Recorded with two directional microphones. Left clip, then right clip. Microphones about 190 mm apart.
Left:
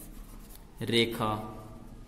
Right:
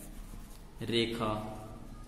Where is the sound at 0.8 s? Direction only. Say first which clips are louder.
Left 4 dB; 45° left (ahead or behind).